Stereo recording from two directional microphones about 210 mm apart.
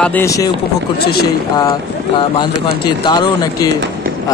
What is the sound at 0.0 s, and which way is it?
Speech, 10° left (ahead or behind).